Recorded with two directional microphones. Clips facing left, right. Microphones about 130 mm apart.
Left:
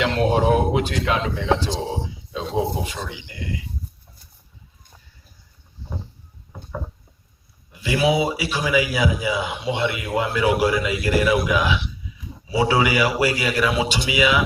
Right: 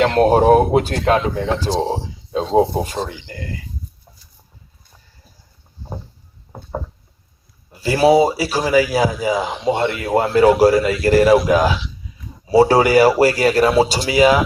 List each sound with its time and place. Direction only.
0.0 s a man's voice: 45° right (ahead or behind)
6.5 s a sound: 40° right (ahead or behind)
7.7 s a man's voice: 40° right (ahead or behind)